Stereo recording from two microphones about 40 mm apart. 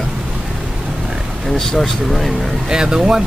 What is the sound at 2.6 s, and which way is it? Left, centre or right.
Speech, centre.